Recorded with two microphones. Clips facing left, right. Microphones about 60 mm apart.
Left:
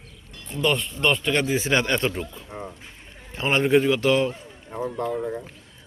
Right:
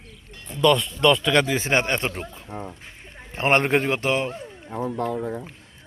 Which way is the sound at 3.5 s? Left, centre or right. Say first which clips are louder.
Even; right.